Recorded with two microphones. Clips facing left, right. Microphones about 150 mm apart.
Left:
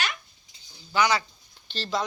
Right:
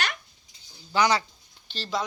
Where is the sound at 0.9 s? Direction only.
35° right (ahead or behind).